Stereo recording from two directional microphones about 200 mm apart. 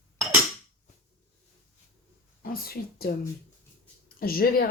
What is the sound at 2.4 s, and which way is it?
Speech, 50° left (ahead or behind).